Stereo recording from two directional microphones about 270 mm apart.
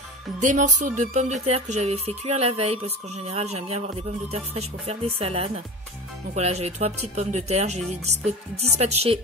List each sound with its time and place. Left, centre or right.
0.4 s music: right